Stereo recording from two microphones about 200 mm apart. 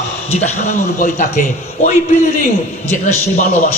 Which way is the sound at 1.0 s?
40° left (ahead or behind).